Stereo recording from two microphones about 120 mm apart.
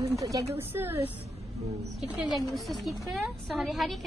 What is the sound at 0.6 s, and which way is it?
Speech, 20° right (ahead or behind).